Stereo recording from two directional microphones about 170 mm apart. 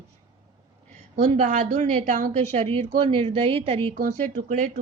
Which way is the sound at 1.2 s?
45° right (ahead or behind).